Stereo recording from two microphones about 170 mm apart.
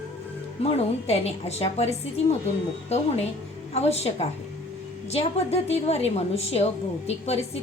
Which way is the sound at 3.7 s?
40° left (ahead or behind).